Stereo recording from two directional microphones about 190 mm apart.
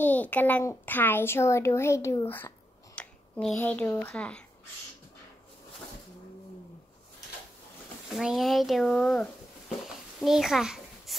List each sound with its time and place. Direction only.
0.0 s a child's voice: 10° left (ahead or behind)
8.1 s speech: centre (ahead or behind)
9.8 s a sound: centre (ahead or behind)